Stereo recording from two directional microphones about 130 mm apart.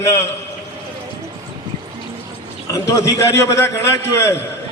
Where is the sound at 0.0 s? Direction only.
20° left (ahead or behind).